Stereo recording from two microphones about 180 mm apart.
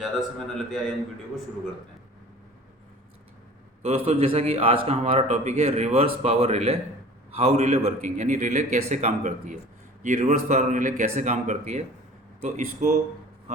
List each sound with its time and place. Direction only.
0.0 s a man's voice: centre (ahead or behind)
3.8 s a man's voice: 35° right (ahead or behind)